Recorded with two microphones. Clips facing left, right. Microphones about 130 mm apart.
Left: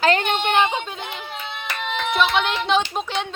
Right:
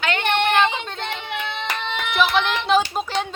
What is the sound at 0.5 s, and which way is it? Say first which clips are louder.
Speech: even; 15° left (ahead or behind).